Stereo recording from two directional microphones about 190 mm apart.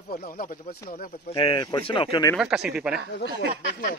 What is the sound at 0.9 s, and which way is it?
Speech, 35° left (ahead or behind).